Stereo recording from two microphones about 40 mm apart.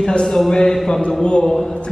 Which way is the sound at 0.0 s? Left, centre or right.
Centre.